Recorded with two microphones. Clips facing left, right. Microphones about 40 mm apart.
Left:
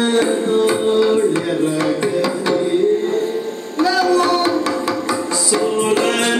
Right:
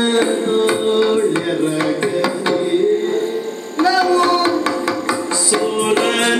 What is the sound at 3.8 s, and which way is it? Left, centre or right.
Music, right.